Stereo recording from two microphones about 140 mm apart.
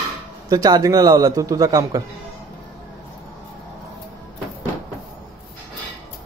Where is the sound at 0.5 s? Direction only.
25° right (ahead or behind).